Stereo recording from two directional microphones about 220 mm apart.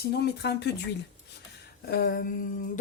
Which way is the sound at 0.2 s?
50° left (ahead or behind).